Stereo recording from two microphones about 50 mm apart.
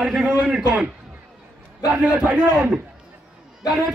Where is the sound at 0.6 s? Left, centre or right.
Right.